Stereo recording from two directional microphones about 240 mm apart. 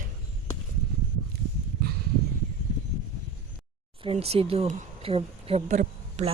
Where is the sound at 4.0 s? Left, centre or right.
Right.